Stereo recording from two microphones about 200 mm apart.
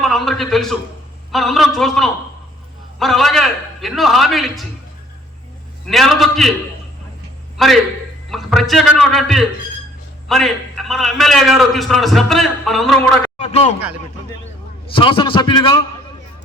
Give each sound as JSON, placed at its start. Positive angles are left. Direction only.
{"t": 0.0, "sound": "a man's voice", "side_deg": 0}
{"t": 5.9, "sound": "a man's voice", "side_deg": 0}
{"t": 7.6, "sound": "a man's voice", "side_deg": 0}
{"t": 13.4, "sound": "speech", "side_deg": 35}
{"t": 14.9, "sound": "a man's voice", "side_deg": 25}